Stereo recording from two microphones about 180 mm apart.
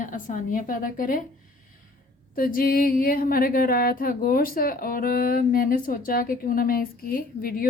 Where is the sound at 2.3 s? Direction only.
50° left (ahead or behind).